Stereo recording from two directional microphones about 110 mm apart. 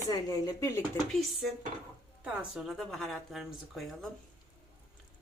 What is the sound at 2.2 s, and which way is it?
Speech, 10° right (ahead or behind).